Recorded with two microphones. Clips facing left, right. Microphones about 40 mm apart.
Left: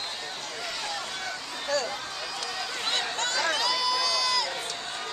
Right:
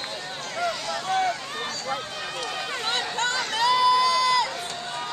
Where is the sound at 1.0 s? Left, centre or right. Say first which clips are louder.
Right 11 dB; right.